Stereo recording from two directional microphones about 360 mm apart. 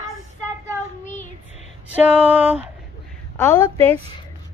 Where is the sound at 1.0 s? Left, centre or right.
Centre.